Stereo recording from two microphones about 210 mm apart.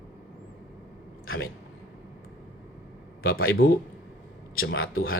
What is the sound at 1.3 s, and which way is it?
Speech, 70° left (ahead or behind).